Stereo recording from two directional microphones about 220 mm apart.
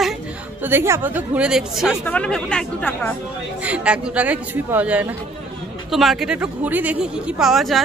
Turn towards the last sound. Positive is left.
turn(degrees=0)  # may be behind; listen again after turning